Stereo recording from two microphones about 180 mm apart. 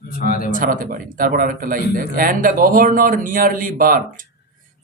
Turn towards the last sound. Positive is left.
turn(degrees=-50)  # may be behind; listen again after turning